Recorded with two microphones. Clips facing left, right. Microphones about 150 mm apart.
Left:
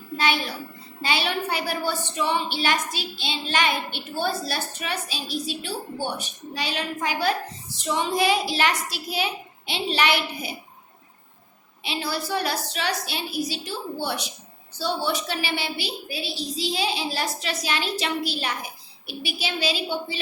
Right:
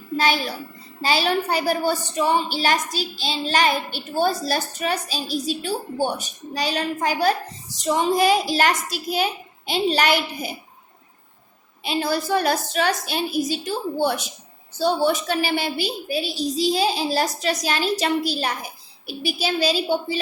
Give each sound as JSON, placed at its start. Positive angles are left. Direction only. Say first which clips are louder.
{"t": 1.0, "sound": "a woman's voice", "louder": "right 5 dB", "side_deg": -40}
{"t": 11.8, "sound": "a woman's voice", "louder": "right 6 dB", "side_deg": -45}